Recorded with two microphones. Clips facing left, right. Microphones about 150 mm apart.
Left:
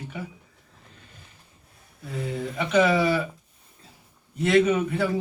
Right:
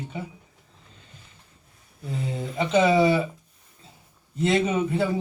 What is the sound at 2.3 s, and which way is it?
Speech, 25° right (ahead or behind).